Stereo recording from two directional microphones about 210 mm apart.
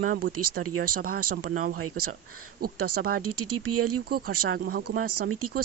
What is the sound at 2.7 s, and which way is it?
Speech, 90° right.